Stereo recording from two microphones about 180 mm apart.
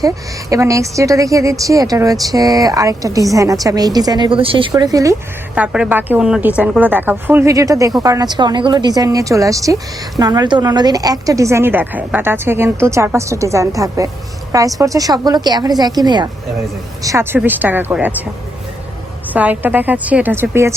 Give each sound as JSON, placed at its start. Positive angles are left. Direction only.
{"t": 0.5, "sound": "a woman's voice", "side_deg": -15}
{"t": 5.5, "sound": "a woman's voice", "side_deg": -5}
{"t": 19.3, "sound": "speech", "side_deg": -10}